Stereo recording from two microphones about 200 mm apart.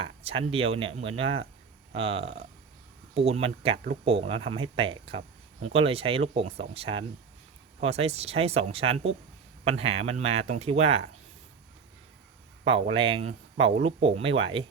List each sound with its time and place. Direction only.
0.0 s speech: 25° right (ahead or behind)
12.9 s speech: 25° right (ahead or behind)